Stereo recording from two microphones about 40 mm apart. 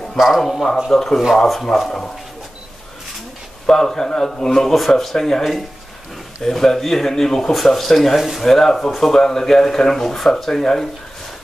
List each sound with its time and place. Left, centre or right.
0.2 s speech: centre
3.6 s speech: centre
6.4 s speech: centre